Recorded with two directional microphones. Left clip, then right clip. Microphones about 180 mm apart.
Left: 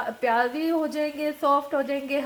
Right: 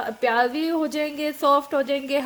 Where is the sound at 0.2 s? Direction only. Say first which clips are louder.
Right 3 dB; 70° right (ahead or behind).